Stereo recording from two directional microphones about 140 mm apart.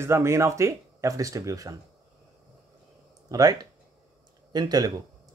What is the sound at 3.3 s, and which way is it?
Speech, 25° right (ahead or behind).